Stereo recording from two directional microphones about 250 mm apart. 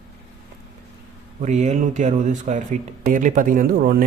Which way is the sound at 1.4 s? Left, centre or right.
Right.